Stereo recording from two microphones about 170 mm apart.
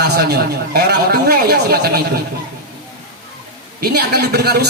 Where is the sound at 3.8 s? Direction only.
70° right (ahead or behind).